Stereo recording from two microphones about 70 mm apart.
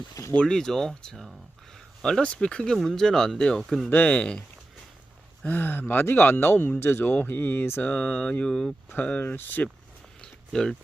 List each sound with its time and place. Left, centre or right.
0.4 s speech: centre
2.7 s speech: centre
3.8 s speech: left
5.4 s speech: left
7.9 s speech: centre
9.0 s speech: left
10.2 s a sound: centre